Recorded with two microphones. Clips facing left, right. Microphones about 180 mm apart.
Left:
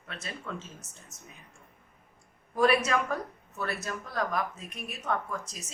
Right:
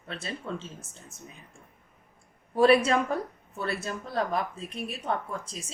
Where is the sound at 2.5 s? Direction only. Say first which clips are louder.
Right 4 dB; 30° right (ahead or behind).